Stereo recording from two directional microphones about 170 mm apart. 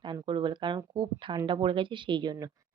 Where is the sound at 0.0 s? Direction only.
30° right (ahead or behind).